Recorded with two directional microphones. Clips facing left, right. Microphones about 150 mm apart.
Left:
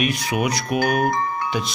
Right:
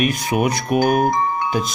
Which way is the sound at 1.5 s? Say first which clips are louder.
Right 3 dB; 45° right (ahead or behind).